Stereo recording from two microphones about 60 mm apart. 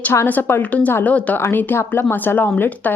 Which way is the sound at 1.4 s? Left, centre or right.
Left.